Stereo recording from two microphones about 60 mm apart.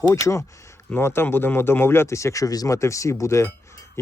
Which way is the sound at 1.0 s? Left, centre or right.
Left.